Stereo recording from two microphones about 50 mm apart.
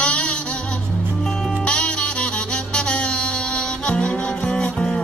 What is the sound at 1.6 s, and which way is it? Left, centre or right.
Saxophone, left.